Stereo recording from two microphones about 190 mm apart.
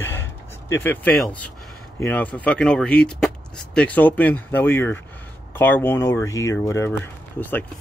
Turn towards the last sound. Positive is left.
turn(degrees=10)  # may be behind; listen again after turning